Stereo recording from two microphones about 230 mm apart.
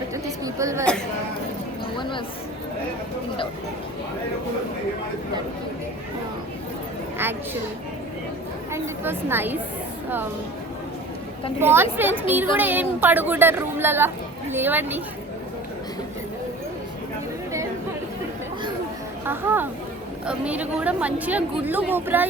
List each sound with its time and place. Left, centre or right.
0.1 s chatter: centre
2.0 s a sound: left
8.7 s a woman's voice: centre
11.6 s a woman's voice: centre
19.2 s a sound: centre
20.2 s a woman's voice: centre